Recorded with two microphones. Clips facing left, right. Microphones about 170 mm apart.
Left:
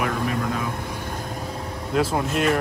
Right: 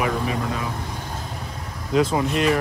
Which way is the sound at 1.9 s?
Centre (ahead or behind).